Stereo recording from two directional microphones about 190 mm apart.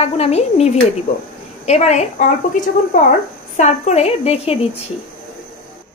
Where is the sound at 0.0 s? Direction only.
35° left (ahead or behind).